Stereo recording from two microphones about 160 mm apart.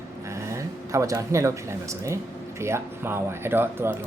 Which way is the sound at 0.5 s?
20° right (ahead or behind).